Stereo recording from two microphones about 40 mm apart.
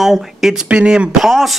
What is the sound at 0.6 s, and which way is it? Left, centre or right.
Speech, right.